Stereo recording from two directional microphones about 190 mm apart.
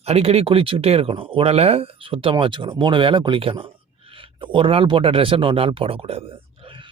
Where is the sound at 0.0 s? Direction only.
30° right (ahead or behind).